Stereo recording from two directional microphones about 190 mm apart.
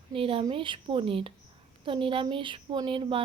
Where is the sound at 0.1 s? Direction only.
30° right (ahead or behind).